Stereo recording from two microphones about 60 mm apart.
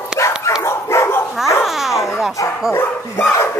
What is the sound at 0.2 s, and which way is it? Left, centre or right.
Dog, left.